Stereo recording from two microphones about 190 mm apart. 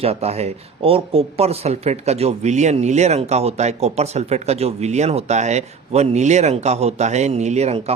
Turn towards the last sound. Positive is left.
turn(degrees=-35)  # may be behind; listen again after turning